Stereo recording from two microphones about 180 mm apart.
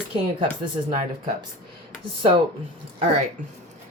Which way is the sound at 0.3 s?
30° right (ahead or behind).